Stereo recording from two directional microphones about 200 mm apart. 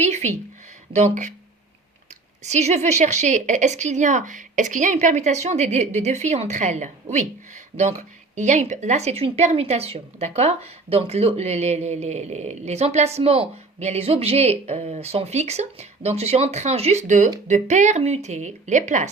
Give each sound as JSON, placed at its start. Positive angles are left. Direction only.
{"t": 0.0, "sound": "a sound", "side_deg": -35}
{"t": 0.9, "sound": "speech", "side_deg": -35}
{"t": 2.4, "sound": "speech", "side_deg": -35}